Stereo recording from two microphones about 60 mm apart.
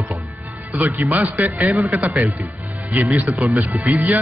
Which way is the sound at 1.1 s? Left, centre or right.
Right.